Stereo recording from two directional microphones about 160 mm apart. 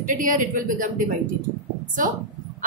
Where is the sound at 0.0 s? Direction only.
55° right (ahead or behind).